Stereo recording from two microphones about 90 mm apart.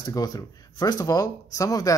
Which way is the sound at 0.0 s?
45° left (ahead or behind).